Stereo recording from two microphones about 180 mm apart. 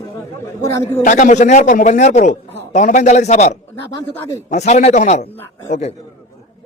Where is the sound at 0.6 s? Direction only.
15° left (ahead or behind).